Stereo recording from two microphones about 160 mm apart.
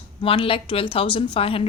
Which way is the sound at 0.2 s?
35° left (ahead or behind).